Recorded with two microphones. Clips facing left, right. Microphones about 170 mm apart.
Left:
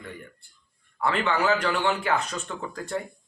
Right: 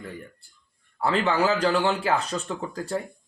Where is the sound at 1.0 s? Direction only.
35° right (ahead or behind).